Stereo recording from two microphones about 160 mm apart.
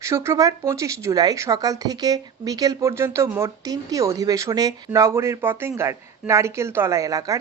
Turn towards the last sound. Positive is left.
turn(degrees=-20)  # may be behind; listen again after turning